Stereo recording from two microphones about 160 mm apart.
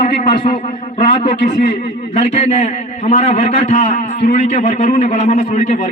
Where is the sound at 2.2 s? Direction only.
45° left (ahead or behind).